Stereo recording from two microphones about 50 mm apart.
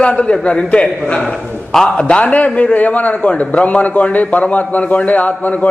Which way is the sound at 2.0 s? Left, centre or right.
Left.